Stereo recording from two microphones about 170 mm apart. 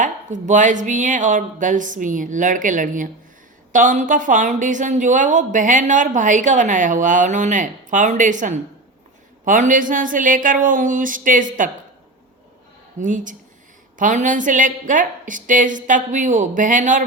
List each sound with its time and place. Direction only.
0.4 s a woman's voice: 45° right (ahead or behind)
13.0 s a woman's voice: 50° right (ahead or behind)